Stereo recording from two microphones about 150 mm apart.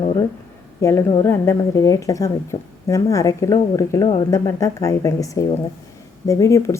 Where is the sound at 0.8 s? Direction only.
20° left (ahead or behind).